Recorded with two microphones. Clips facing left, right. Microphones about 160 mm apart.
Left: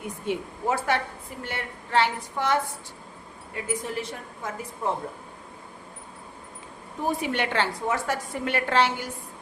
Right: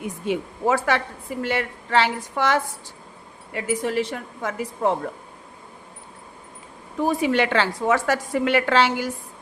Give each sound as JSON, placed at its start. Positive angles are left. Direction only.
{"t": 0.3, "sound": "a woman's voice", "side_deg": -90}
{"t": 7.2, "sound": "a woman's voice", "side_deg": -90}